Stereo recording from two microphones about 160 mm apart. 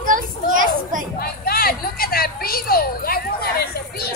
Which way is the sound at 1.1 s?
70° left (ahead or behind).